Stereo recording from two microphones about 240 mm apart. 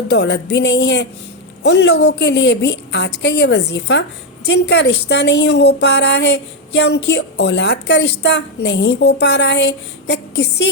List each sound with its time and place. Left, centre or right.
0.1 s a woman's voice: left